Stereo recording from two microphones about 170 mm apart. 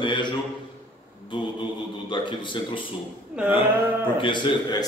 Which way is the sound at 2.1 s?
30° left (ahead or behind).